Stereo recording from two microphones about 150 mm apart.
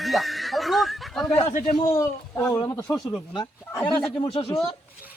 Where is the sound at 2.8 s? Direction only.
10° left (ahead or behind).